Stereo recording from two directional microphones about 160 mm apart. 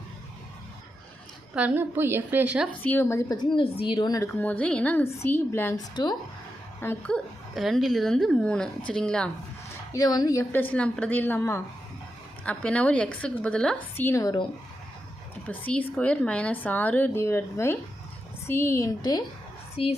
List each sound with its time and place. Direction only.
1.5 s a woman's voice: 10° right (ahead or behind)
2.8 s a woman's voice: 15° left (ahead or behind)
4.4 s a woman's voice: 10° left (ahead or behind)
5.9 s a woman's voice: 25° left (ahead or behind)
6.8 s a woman's voice: 10° left (ahead or behind)
7.5 s speech: centre (ahead or behind)
9.9 s a woman's voice: 25° left (ahead or behind)
10.5 s a woman's voice: 10° left (ahead or behind)
15.4 s a woman's voice: 10° left (ahead or behind)
19.7 s speech: 35° left (ahead or behind)